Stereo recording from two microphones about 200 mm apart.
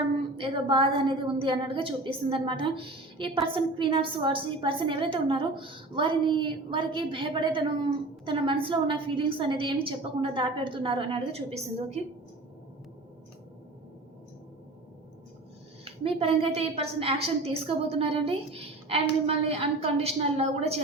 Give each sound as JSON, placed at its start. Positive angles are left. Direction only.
{"t": 0.3, "sound": "a woman's voice", "side_deg": -25}
{"t": 15.8, "sound": "a woman's voice", "side_deg": -25}